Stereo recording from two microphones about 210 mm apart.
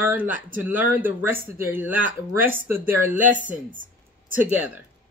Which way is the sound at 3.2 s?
40° right (ahead or behind).